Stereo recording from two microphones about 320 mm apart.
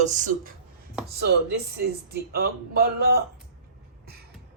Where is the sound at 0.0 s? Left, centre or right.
Right.